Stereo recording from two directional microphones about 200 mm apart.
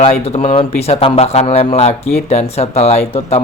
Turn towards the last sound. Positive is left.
turn(degrees=30)  # may be behind; listen again after turning